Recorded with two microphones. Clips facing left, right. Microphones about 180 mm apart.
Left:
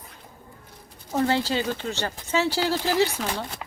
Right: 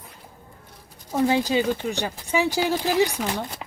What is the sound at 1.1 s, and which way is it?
Speech, 15° right (ahead or behind).